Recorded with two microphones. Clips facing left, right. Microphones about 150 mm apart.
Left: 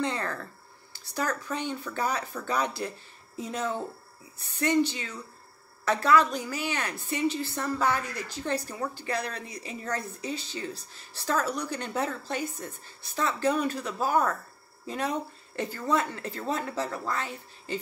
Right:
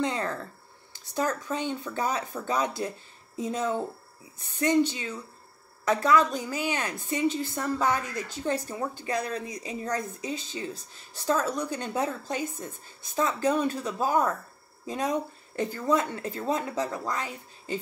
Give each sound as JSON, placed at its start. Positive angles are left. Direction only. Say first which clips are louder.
{"t": 0.0, "sound": "a sound", "louder": "right 2 dB", "side_deg": -20}
{"t": 0.9, "sound": "a woman's voice", "louder": "right 2 dB", "side_deg": -20}
{"t": 15.7, "sound": "speech", "louder": "right 2 dB", "side_deg": -20}